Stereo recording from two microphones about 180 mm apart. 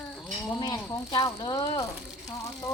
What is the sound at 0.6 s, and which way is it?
Speech, 20° left (ahead or behind).